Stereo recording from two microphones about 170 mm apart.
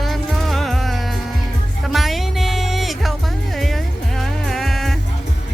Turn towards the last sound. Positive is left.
turn(degrees=0)  # may be behind; listen again after turning